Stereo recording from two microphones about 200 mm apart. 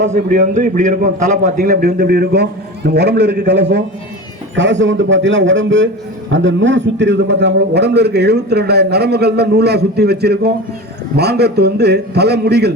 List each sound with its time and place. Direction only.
0.0 s a man's voice: 35° right (ahead or behind); by 12.7 s 55° right (ahead or behind)